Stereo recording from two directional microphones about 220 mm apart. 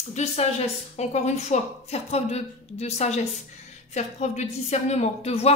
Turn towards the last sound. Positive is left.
turn(degrees=30)  # may be behind; listen again after turning